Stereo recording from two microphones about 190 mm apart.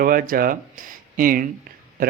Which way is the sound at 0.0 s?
50° right (ahead or behind).